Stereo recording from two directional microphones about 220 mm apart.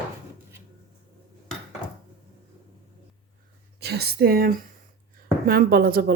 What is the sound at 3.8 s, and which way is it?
A woman's voice, 45° right (ahead or behind).